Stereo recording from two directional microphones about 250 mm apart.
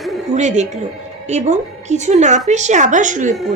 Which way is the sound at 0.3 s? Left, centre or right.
Right.